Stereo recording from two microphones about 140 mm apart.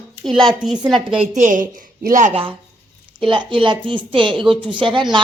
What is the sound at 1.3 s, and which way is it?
A woman's voice, 65° right (ahead or behind).